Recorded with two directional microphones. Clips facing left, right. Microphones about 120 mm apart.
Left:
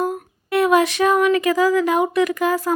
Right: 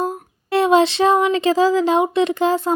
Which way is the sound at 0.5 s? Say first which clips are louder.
Right 2 dB; 25° right (ahead or behind).